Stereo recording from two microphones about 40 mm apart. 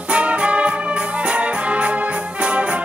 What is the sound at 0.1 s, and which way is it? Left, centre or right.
Music, right.